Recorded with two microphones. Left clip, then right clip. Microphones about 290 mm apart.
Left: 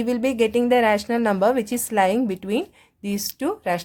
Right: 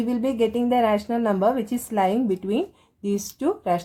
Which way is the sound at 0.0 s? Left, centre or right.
Left.